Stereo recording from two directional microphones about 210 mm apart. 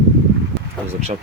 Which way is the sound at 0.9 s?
30° right (ahead or behind).